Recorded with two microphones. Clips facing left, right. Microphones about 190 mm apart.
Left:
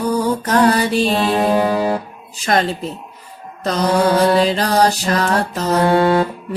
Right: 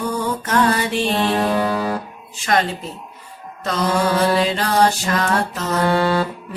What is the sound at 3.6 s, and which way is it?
Mantra, 40° left (ahead or behind).